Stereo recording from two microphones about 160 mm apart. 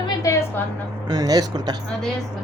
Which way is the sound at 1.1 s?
25° right (ahead or behind).